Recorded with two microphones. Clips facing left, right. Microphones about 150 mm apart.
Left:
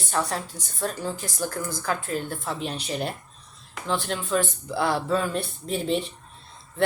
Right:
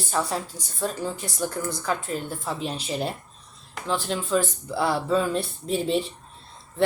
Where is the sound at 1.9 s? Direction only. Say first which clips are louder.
Left 1 dB; 30° right (ahead or behind).